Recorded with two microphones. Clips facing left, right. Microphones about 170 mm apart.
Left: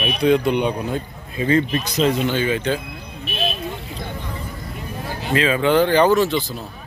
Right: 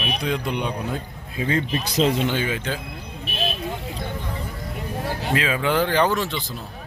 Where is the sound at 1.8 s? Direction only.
25° right (ahead or behind).